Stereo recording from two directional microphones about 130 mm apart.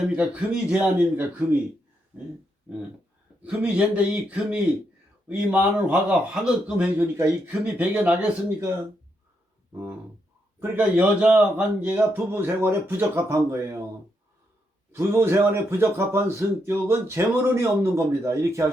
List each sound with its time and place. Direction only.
0.1 s a man's voice: 5° right (ahead or behind)
3.4 s a man's voice: 10° right (ahead or behind)
10.6 s a man's voice: 10° right (ahead or behind)
14.9 s a man's voice: 20° right (ahead or behind)